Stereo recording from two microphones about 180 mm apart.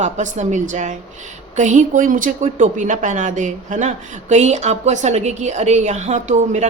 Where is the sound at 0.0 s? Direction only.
40° right (ahead or behind).